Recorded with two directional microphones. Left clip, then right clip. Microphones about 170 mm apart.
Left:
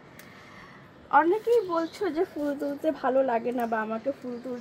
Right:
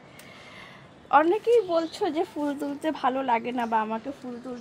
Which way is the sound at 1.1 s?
40° right (ahead or behind).